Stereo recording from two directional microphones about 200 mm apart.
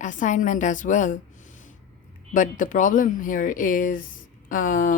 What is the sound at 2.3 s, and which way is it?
A woman's voice, 40° left (ahead or behind).